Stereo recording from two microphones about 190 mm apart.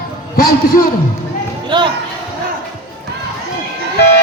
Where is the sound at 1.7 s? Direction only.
25° right (ahead or behind).